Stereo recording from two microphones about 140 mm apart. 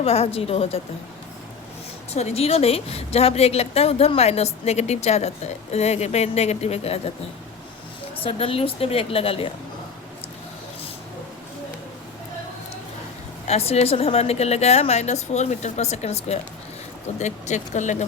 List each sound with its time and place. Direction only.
0.0 s a woman's voice: 45° left (ahead or behind)
2.1 s a woman's voice: 50° left (ahead or behind)
8.1 s a woman's voice: 40° left (ahead or behind)
13.5 s a woman's voice: 45° left (ahead or behind)